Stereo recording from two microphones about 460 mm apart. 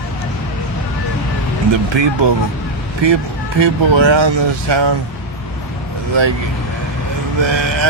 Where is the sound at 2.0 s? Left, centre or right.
Right.